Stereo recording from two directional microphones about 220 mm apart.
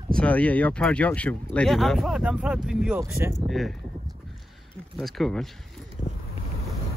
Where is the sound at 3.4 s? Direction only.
Centre (ahead or behind).